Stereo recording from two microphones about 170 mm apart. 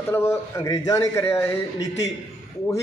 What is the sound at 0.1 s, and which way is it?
A man's voice, 15° left (ahead or behind).